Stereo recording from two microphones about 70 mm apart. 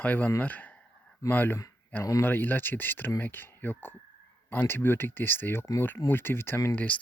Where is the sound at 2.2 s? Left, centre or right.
Left.